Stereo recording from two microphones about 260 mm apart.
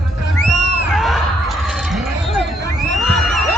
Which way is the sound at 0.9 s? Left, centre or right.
Centre.